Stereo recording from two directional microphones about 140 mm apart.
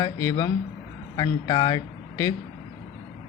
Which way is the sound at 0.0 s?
25° left (ahead or behind).